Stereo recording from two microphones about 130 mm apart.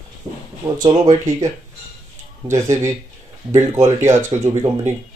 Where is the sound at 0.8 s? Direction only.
30° right (ahead or behind).